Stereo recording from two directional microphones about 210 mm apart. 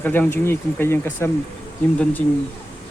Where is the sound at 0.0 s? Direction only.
10° left (ahead or behind).